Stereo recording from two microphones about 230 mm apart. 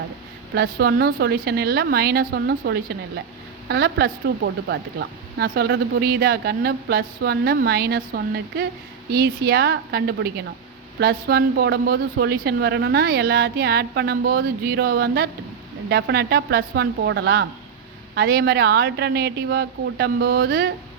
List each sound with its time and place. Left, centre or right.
0.5 s speech: right